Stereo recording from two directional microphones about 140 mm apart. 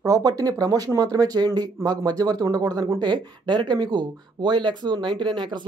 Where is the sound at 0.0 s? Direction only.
25° right (ahead or behind).